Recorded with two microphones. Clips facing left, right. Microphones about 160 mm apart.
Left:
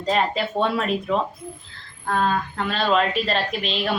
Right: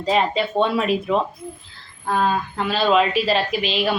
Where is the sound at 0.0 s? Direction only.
Centre (ahead or behind).